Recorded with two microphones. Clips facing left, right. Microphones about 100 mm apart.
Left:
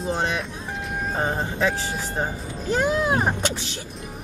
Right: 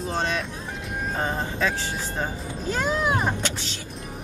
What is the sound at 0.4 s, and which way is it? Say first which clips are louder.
Music: left 1 dB; centre (ahead or behind).